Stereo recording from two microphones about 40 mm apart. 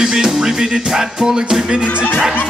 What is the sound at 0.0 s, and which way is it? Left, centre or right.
Music, centre.